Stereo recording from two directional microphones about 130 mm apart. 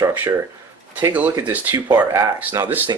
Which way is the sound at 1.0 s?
20° right (ahead or behind).